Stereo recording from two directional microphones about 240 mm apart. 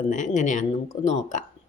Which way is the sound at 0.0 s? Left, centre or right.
Left.